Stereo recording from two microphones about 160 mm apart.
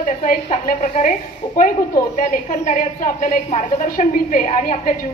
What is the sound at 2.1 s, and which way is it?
A woman's voice, 55° left (ahead or behind).